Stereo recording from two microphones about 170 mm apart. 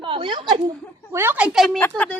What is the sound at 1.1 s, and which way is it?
Speech, 10° right (ahead or behind).